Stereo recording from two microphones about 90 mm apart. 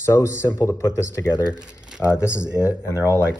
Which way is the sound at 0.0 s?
30° left (ahead or behind).